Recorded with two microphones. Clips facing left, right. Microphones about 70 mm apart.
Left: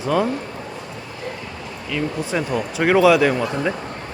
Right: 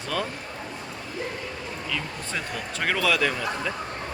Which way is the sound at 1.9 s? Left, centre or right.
Centre.